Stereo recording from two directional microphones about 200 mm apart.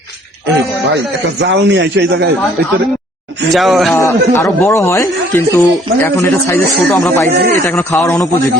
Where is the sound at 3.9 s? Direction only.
15° left (ahead or behind).